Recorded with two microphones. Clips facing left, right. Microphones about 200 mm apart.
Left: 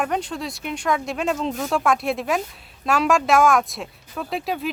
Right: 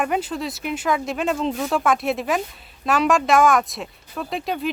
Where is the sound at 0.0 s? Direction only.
5° right (ahead or behind).